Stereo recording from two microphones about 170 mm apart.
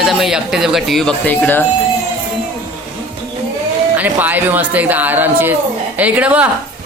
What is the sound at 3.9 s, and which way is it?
Speech, 10° right (ahead or behind).